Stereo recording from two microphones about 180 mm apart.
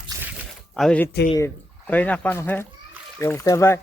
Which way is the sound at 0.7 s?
5° left (ahead or behind).